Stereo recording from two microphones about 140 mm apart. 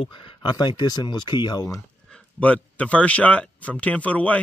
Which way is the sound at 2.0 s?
5° left (ahead or behind).